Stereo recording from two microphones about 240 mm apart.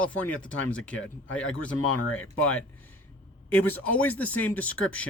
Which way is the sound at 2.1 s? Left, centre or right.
Centre.